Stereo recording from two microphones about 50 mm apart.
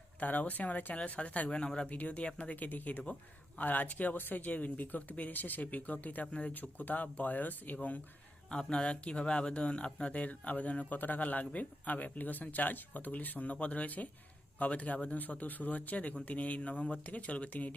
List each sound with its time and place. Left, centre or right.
0.2 s speech: left
1.9 s speech: left
8.4 s speech: centre